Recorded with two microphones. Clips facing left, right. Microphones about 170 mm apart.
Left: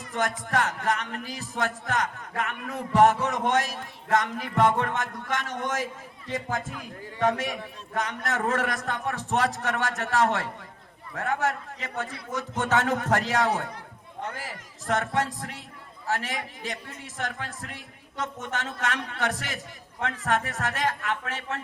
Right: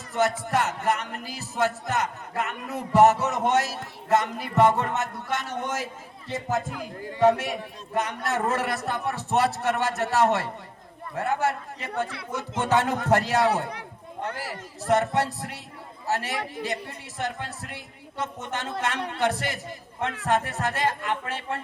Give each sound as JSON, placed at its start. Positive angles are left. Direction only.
{"t": 0.1, "sound": "speech", "side_deg": -10}
{"t": 7.2, "sound": "a man's voice", "side_deg": -10}